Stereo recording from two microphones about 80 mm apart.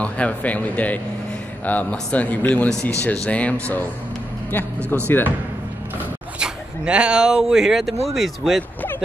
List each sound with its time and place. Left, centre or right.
0.0 s speech: centre
5.0 s speech: left
6.4 s speech: centre